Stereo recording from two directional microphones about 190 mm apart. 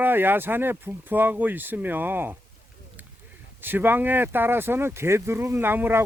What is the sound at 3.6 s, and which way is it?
Speech, 10° right (ahead or behind).